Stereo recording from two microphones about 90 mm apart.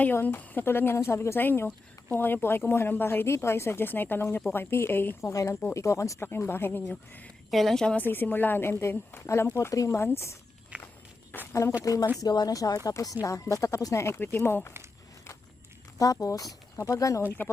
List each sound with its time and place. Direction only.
0.0 s speech: 20° left (ahead or behind)
5.2 s speech: 35° left (ahead or behind); by 7.3 s 20° left (ahead or behind)
7.5 s a woman's voice: 5° left (ahead or behind)
7.9 s speech: 20° left (ahead or behind)
10.7 s walk: 15° right (ahead or behind)
11.3 s a sound: 25° left (ahead or behind)
12.2 s speech: 45° left (ahead or behind); by 14.7 s 25° left (ahead or behind)
16.2 s speech: 40° left (ahead or behind)